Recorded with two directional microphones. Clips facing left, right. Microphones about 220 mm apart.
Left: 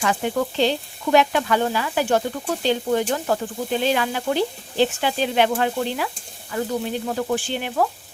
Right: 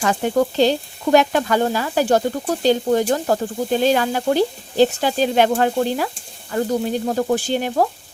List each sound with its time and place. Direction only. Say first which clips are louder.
0.0 s frying: right 4 dB; 40° right (ahead or behind)